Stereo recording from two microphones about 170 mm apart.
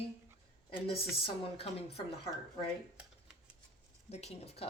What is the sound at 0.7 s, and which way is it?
A woman's voice, 35° left (ahead or behind).